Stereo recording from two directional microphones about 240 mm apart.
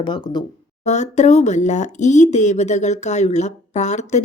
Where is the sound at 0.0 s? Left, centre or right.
Centre.